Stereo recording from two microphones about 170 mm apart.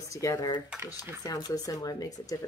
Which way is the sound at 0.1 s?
20° left (ahead or behind).